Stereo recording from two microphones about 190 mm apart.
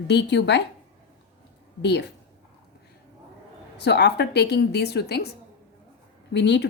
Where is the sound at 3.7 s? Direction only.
60° left (ahead or behind).